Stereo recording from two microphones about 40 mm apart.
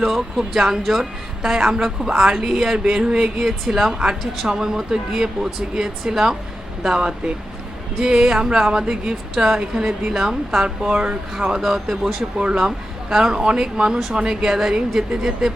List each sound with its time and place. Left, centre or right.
0.0 s a woman's voice: centre
8.4 s a woman's voice: right
12.4 s a woman's voice: right